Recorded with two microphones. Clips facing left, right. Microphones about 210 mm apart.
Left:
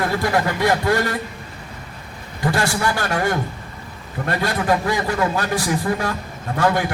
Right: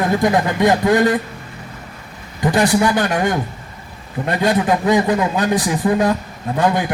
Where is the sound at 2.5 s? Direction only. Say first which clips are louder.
Right 8 dB; 20° right (ahead or behind).